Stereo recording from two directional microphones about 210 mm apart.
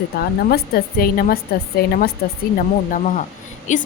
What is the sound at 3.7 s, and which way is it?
Speech, 35° left (ahead or behind).